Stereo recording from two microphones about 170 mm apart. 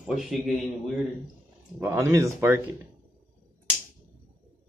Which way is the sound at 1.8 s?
15° right (ahead or behind).